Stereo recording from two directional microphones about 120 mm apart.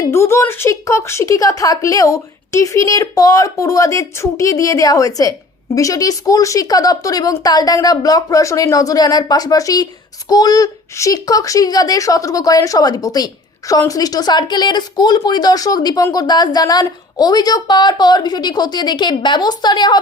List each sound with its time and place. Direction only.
0.1 s a woman's voice: 20° left (ahead or behind); by 20.0 s 35° left (ahead or behind)